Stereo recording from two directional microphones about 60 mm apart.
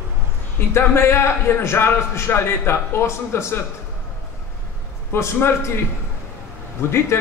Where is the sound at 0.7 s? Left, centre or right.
Left.